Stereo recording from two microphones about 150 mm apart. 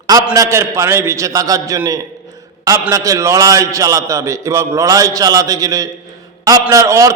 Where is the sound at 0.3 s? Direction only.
20° right (ahead or behind).